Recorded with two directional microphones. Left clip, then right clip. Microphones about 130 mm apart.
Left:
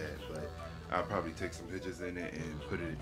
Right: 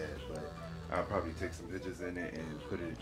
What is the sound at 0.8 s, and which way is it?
Speech, 35° left (ahead or behind).